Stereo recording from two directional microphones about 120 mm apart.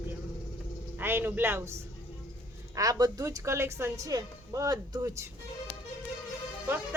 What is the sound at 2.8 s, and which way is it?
A woman's voice, 30° right (ahead or behind).